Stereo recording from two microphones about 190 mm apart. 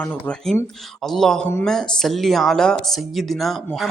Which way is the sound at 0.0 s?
5° left (ahead or behind).